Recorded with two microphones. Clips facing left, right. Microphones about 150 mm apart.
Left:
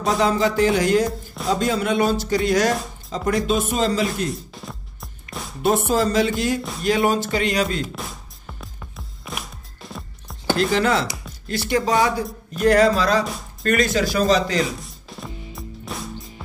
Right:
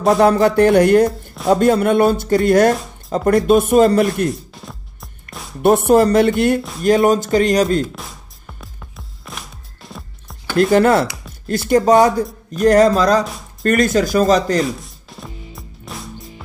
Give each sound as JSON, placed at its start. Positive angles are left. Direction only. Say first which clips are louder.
{"t": 0.2, "sound": "speech", "louder": "right 5 dB", "side_deg": -60}
{"t": 4.3, "sound": "music", "louder": "right 4 dB", "side_deg": 0}
{"t": 5.6, "sound": "speech", "louder": "right 8 dB", "side_deg": -60}
{"t": 6.8, "sound": "speech", "louder": "right 6 dB", "side_deg": -45}
{"t": 7.9, "sound": "music", "louder": "left 1 dB", "side_deg": 0}
{"t": 10.6, "sound": "speech", "louder": "right 8 dB", "side_deg": -55}
{"t": 13.2, "sound": "speech", "louder": "right 2 dB", "side_deg": 0}
{"t": 13.6, "sound": "speech", "louder": "right 5 dB", "side_deg": -45}
{"t": 14.6, "sound": "music", "louder": "right 4 dB", "side_deg": 0}